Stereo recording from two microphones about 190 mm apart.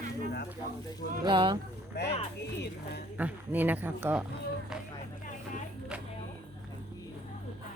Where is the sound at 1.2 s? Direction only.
25° right (ahead or behind).